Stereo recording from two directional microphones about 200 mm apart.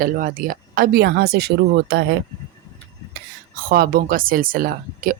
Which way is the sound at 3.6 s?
45° right (ahead or behind).